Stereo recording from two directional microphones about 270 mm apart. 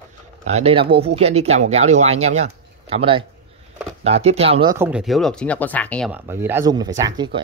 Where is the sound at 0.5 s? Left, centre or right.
Right.